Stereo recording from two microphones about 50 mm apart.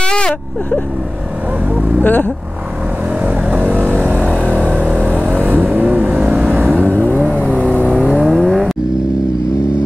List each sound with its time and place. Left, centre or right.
0.0 s a sound: centre
2.0 s speech: left
3.2 s vehicle: right
4.9 s vehicle: right
5.9 s vehicle: right
6.6 s vehicle: right
7.0 s vehicle: left
8.1 s vehicle: centre